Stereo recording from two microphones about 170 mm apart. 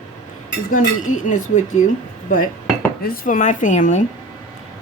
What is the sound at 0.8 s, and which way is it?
Speech, 50° left (ahead or behind).